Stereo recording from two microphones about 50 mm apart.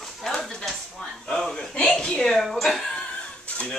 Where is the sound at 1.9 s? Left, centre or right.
Centre.